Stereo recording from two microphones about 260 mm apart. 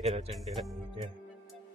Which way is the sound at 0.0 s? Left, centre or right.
Right.